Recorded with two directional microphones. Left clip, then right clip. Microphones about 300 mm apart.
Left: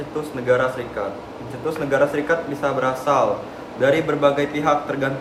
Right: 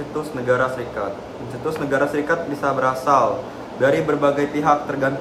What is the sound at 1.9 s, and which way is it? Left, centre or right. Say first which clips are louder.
A man's voice: left 1 dB; centre.